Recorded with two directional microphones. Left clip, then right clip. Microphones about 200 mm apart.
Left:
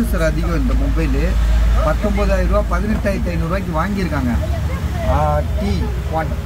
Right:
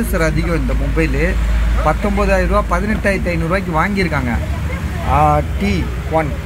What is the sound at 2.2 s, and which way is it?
Speech, 10° right (ahead or behind).